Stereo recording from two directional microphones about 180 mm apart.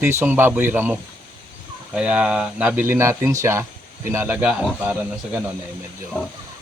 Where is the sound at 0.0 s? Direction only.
15° right (ahead or behind).